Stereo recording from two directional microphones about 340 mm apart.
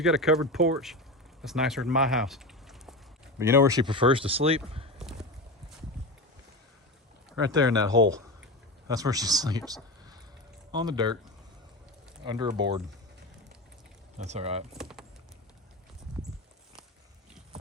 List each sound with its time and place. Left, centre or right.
0.0 s speech: centre
7.4 s speech: centre
12.2 s speech: centre
14.2 s speech: centre
14.7 s speech: centre